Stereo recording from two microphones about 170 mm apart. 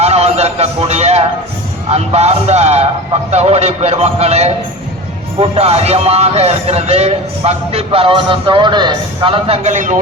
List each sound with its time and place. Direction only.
0.0 s a sound: 40° right (ahead or behind)
1.9 s speech: 40° right (ahead or behind)
9.6 s speech: 45° right (ahead or behind)